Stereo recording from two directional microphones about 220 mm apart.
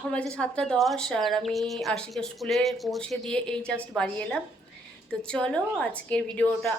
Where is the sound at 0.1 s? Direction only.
5° left (ahead or behind).